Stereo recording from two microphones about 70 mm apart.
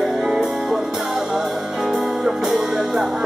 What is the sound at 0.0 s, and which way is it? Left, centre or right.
Music, centre.